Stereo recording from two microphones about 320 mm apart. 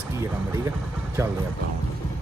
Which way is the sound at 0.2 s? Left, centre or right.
Centre.